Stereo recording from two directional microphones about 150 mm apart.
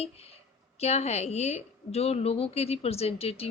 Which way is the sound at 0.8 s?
45° left (ahead or behind).